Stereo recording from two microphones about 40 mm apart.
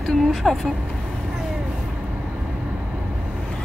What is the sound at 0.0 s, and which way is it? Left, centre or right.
Vehicle, centre.